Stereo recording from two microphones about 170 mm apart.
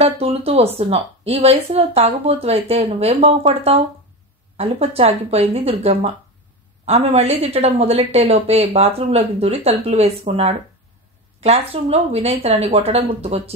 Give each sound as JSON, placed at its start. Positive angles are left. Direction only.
{"t": 0.0, "sound": "speech", "side_deg": -35}